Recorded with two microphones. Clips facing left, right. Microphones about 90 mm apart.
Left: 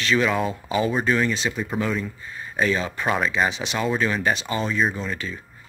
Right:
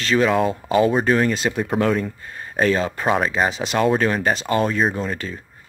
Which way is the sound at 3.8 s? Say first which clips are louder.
Right 4 dB; 50° right (ahead or behind).